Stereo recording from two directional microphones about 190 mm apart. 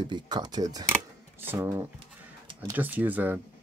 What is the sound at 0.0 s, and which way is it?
Speech, 25° right (ahead or behind).